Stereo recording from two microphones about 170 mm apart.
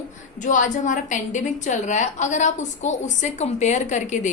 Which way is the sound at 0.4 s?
50° left (ahead or behind).